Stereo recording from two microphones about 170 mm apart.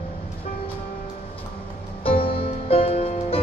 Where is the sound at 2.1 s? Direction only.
35° left (ahead or behind).